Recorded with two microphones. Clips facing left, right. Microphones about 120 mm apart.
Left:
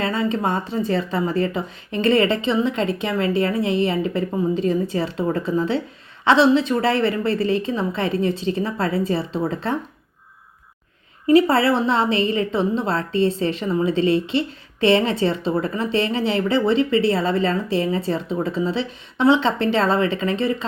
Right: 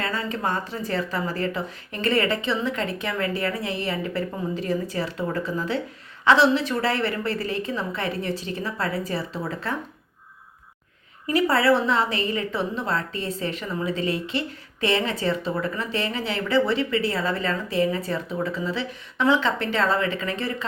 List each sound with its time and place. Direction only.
0.0 s a woman's voice: 25° left (ahead or behind)
11.3 s a woman's voice: 25° left (ahead or behind)